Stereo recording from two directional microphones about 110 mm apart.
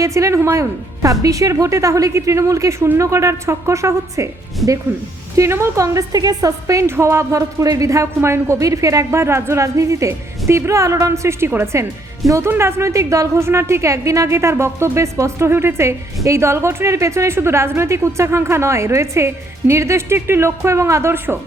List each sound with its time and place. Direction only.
0.0 s a woman's voice: 30° right (ahead or behind)